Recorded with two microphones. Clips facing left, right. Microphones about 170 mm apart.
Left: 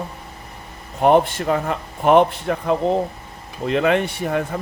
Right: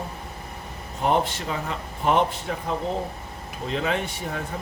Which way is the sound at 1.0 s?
55° left (ahead or behind).